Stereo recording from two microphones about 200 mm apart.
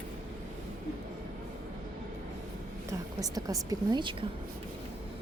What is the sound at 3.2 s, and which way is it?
Speech, 15° right (ahead or behind).